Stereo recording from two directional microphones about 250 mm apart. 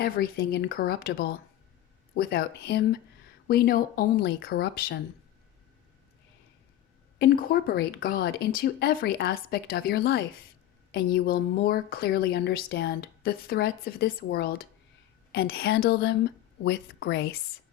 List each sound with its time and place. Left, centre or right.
0.0 s a woman's voice: left
7.2 s a woman's voice: left